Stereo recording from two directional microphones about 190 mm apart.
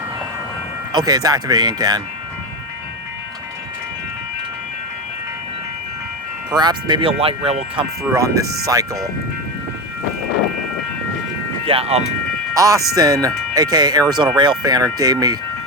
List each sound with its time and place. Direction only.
0.9 s speech: 20° right (ahead or behind)
6.5 s speech: 20° right (ahead or behind)
8.0 s speech: 15° right (ahead or behind)
11.6 s speech: 30° right (ahead or behind)
12.5 s speech: 15° right (ahead or behind)